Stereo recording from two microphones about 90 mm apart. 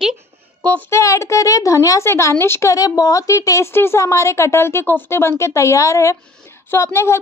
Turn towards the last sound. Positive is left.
turn(degrees=30)  # may be behind; listen again after turning